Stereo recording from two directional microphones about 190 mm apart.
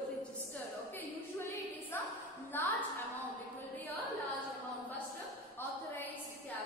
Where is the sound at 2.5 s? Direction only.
10° left (ahead or behind).